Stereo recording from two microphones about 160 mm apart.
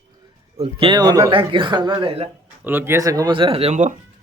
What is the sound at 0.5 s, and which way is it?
Speech, 35° right (ahead or behind).